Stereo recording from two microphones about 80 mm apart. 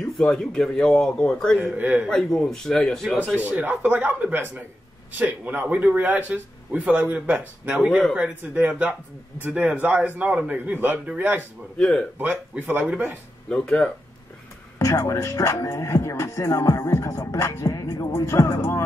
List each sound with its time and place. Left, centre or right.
0.0 s a man's voice: centre
1.8 s speech: right
2.0 s a man's voice: centre
3.4 s speech: centre
11.8 s a man's voice: centre
12.2 s speech: right
13.5 s a man's voice: centre
14.8 s speech: left